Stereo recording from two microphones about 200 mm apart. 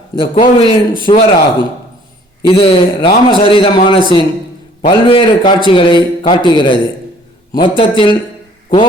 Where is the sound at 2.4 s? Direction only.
25° left (ahead or behind).